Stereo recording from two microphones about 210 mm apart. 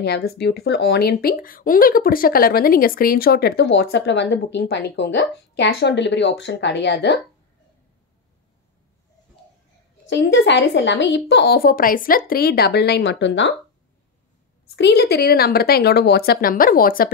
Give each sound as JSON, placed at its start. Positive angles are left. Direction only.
{"t": 0.0, "sound": "speech", "side_deg": 50}
{"t": 10.0, "sound": "speech", "side_deg": 55}
{"t": 14.8, "sound": "speech", "side_deg": 50}